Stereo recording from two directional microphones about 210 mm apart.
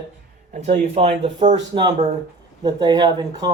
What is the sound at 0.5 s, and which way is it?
Speech, 35° right (ahead or behind).